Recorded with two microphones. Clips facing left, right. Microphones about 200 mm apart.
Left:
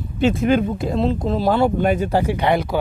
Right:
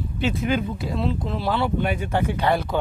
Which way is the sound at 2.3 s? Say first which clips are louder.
Left 3 dB; 15° left (ahead or behind).